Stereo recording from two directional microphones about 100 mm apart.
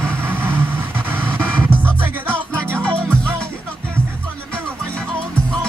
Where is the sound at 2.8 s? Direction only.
10° left (ahead or behind).